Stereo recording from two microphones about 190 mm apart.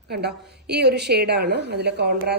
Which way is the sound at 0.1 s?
60° right (ahead or behind).